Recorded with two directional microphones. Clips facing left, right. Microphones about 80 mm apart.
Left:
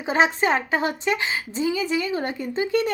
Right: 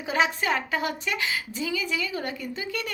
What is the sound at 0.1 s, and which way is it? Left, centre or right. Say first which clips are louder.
A woman's voice: left 5 dB; left.